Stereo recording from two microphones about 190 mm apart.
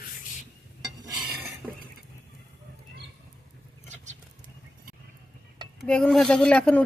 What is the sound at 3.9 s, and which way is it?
Patter, 40° right (ahead or behind).